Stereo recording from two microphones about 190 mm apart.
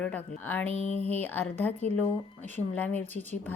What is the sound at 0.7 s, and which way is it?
Speech, 35° right (ahead or behind).